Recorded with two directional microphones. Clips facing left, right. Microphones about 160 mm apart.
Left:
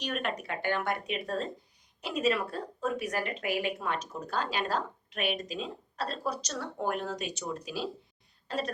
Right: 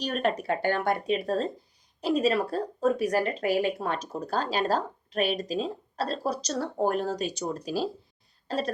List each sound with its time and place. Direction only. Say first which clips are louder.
0.0 s a woman's voice: right 6 dB; 35° right (ahead or behind)